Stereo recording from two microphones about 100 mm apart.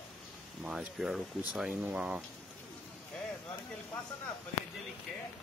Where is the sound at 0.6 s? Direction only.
5° right (ahead or behind).